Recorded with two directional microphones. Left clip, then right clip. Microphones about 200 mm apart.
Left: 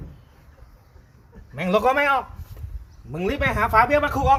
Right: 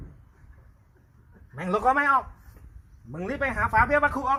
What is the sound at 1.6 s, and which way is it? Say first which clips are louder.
Speech: left 4 dB; 10° right (ahead or behind).